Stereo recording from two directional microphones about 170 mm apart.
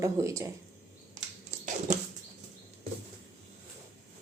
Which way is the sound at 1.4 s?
45° right (ahead or behind).